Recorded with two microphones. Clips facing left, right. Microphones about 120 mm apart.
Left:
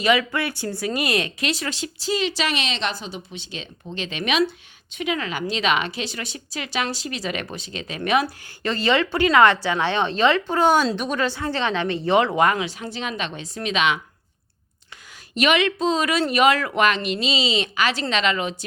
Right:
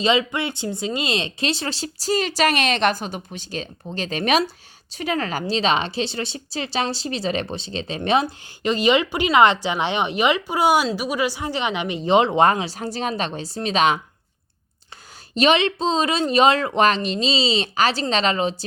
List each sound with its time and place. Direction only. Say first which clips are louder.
0.0 s speech: even; 25° right (ahead or behind)
15.4 s a woman's voice: right 2 dB; 30° right (ahead or behind)